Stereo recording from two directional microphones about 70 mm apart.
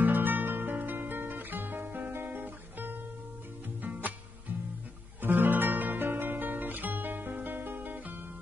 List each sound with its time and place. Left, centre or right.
0.0 s music: right